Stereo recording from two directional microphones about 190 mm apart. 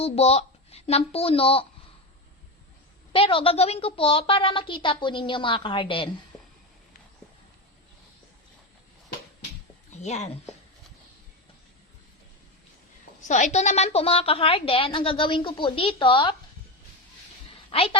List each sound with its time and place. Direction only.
0.0 s speech: 35° left (ahead or behind)
3.1 s a woman's voice: 30° left (ahead or behind)
9.9 s speech: 35° left (ahead or behind)
13.2 s a woman's voice: 40° left (ahead or behind)
17.7 s a woman's voice: 30° left (ahead or behind)